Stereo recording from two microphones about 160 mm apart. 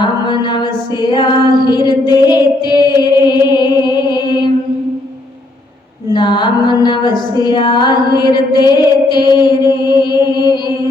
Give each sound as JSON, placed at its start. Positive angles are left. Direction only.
{"t": 0.0, "sound": "music", "side_deg": 30}
{"t": 6.1, "sound": "music", "side_deg": 30}